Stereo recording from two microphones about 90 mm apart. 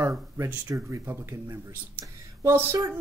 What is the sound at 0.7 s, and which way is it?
Speech, 35° right (ahead or behind).